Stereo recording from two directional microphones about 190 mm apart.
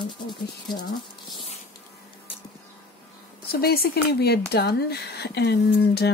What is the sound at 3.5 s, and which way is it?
Speech, 55° left (ahead or behind).